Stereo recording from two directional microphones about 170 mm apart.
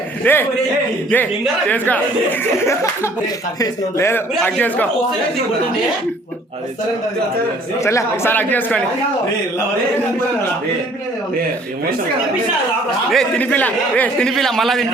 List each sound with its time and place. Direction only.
0.2 s a man's voice: 10° left (ahead or behind)
7.9 s a man's voice: 15° left (ahead or behind)
13.1 s a man's voice: 5° left (ahead or behind)